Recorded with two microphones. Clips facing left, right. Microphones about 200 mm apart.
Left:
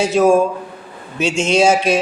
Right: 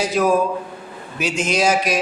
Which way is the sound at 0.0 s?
25° left (ahead or behind).